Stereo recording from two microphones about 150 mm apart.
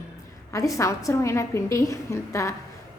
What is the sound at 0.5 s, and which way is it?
A woman's voice, 20° left (ahead or behind).